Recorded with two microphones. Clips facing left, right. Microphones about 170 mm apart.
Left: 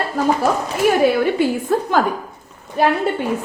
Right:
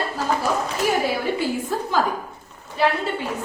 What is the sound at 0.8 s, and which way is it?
Speech, 65° left (ahead or behind).